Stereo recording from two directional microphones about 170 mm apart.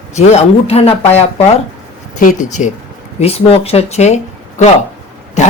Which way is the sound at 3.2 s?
35° left (ahead or behind).